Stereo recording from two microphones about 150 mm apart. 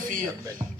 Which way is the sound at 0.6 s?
35° right (ahead or behind).